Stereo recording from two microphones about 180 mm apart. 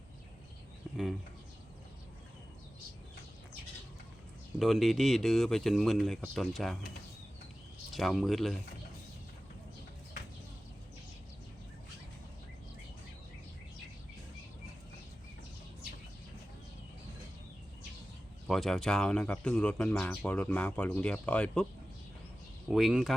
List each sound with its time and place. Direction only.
4.6 s speech: centre (ahead or behind)
7.9 s speech: centre (ahead or behind)
18.4 s speech: centre (ahead or behind)
22.7 s speech: centre (ahead or behind)